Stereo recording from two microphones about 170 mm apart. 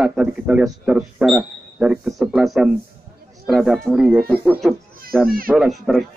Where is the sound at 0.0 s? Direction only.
5° right (ahead or behind).